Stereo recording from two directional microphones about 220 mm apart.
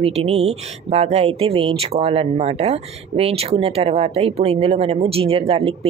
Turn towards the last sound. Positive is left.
turn(degrees=-25)  # may be behind; listen again after turning